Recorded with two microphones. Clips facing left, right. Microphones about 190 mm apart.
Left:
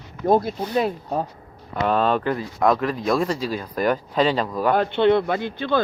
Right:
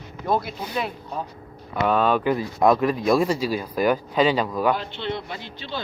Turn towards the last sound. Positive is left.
turn(degrees=55)  # may be behind; listen again after turning